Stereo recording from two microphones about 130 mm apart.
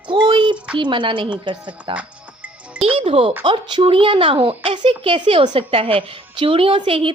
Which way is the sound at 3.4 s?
35° right (ahead or behind).